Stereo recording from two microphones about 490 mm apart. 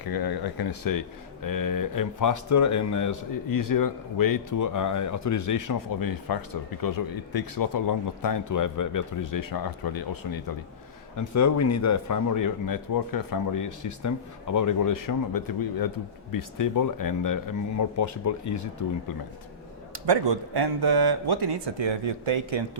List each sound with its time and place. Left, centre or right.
0.0 s speech: left
11.2 s speech: left
19.9 s speech: right